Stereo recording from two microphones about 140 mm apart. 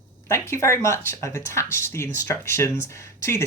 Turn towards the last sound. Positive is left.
turn(degrees=20)  # may be behind; listen again after turning